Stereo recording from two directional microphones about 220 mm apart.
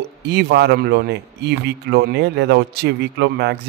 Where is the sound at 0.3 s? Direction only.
50° right (ahead or behind).